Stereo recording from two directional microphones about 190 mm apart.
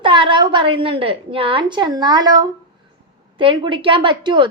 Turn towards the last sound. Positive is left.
turn(degrees=-25)  # may be behind; listen again after turning